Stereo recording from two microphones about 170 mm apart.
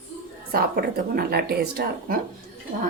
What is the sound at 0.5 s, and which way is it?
A woman's voice, 65° right (ahead or behind).